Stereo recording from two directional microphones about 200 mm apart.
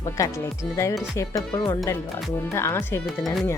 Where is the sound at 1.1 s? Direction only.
15° left (ahead or behind).